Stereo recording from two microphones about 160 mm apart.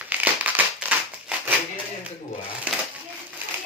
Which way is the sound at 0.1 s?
10° right (ahead or behind).